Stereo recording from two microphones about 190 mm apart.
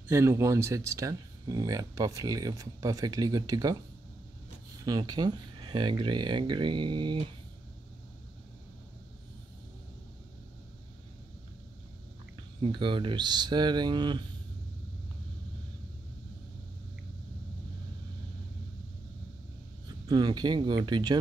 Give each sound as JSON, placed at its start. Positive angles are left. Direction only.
{"t": 0.1, "sound": "speech", "side_deg": -15}
{"t": 4.8, "sound": "speech", "side_deg": -20}
{"t": 12.6, "sound": "speech", "side_deg": -25}
{"t": 19.9, "sound": "speech", "side_deg": -20}